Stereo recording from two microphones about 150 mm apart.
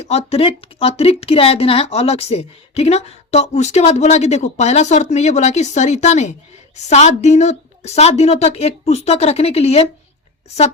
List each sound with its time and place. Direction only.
0.0 s speech: 45° left (ahead or behind)